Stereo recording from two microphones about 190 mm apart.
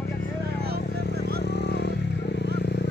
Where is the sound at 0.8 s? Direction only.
60° left (ahead or behind).